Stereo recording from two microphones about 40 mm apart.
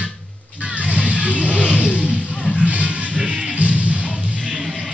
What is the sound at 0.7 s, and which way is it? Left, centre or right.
Vehicle, right.